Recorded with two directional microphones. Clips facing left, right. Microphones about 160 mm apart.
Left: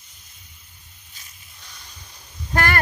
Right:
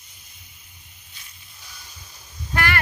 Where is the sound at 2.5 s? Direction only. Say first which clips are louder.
Left 3 dB; 45° left (ahead or behind).